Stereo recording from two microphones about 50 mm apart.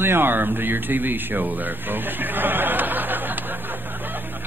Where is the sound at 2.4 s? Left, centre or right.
Right.